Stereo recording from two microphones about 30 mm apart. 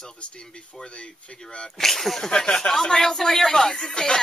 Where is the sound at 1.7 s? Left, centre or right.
Centre.